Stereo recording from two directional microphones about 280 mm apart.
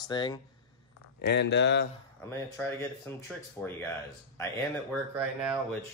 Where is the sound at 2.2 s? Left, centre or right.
Centre.